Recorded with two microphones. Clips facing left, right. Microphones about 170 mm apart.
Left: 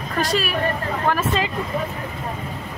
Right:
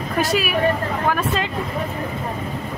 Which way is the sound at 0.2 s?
10° right (ahead or behind).